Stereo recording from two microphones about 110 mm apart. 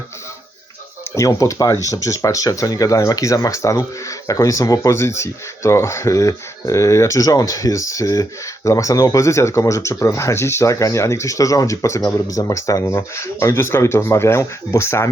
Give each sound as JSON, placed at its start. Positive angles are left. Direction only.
{"t": 1.1, "sound": "speech", "side_deg": 30}